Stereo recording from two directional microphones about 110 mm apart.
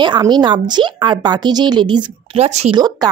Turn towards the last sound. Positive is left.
turn(degrees=-35)  # may be behind; listen again after turning